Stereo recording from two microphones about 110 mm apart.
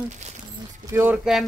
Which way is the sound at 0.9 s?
20° right (ahead or behind).